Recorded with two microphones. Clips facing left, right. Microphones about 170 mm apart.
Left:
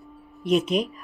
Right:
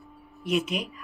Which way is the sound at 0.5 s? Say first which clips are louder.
Left 6 dB; 35° left (ahead or behind).